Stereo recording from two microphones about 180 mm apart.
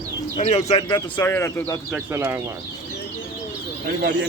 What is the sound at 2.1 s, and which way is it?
Speech, 15° right (ahead or behind).